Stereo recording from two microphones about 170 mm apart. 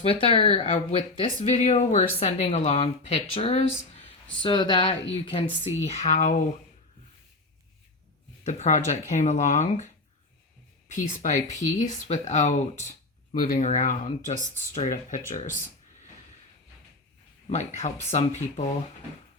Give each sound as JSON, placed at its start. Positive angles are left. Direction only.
{"t": 0.1, "sound": "speech", "side_deg": 30}
{"t": 8.4, "sound": "speech", "side_deg": 45}
{"t": 10.9, "sound": "speech", "side_deg": 50}
{"t": 11.3, "sound": "speech", "side_deg": 20}
{"t": 11.8, "sound": "speech", "side_deg": 40}
{"t": 13.4, "sound": "speech", "side_deg": 60}
{"t": 13.7, "sound": "speech", "side_deg": 50}
{"t": 17.5, "sound": "speech", "side_deg": 40}